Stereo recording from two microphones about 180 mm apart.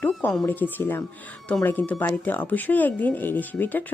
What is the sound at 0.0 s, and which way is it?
A woman's voice, 10° left (ahead or behind).